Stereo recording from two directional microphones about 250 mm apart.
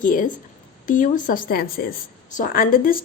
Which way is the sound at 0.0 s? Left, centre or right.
Left.